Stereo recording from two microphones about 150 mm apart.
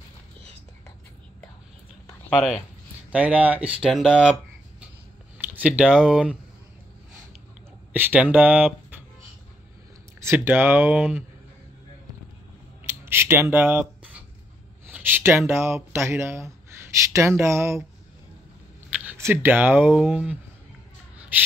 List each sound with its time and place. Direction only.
2.3 s speech: 5° right (ahead or behind)
7.9 s speech: 10° right (ahead or behind)
10.2 s speech: 15° right (ahead or behind)
12.8 s scissors: 15° right (ahead or behind)
14.9 s speech: 10° right (ahead or behind)
18.9 s speech: 15° right (ahead or behind)